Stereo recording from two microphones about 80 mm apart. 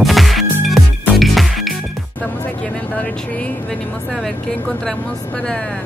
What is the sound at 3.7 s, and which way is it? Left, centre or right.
Speech, centre.